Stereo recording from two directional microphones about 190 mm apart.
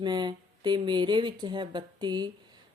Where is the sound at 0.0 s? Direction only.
25° right (ahead or behind).